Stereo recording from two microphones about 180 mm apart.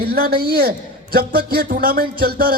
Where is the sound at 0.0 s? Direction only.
60° right (ahead or behind).